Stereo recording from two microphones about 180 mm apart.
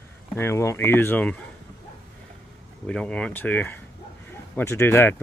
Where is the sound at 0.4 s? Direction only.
15° left (ahead or behind).